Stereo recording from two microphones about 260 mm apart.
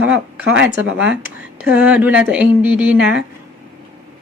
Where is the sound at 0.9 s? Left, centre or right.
Centre.